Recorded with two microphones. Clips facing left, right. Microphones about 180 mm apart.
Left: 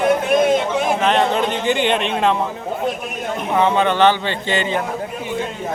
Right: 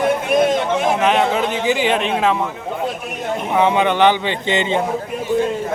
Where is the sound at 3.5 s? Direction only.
15° right (ahead or behind).